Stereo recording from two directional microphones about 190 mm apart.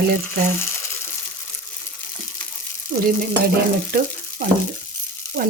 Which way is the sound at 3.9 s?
50° right (ahead or behind).